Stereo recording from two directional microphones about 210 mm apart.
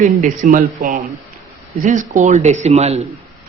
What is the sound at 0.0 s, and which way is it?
Speech, 40° right (ahead or behind).